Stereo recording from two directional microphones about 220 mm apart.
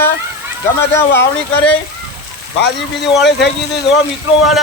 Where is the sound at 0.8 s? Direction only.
10° left (ahead or behind).